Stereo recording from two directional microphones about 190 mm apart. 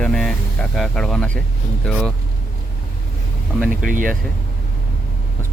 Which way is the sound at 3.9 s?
45° right (ahead or behind).